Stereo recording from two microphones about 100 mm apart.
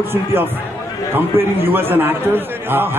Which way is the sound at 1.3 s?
25° right (ahead or behind).